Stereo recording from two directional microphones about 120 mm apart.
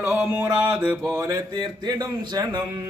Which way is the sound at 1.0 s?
30° right (ahead or behind).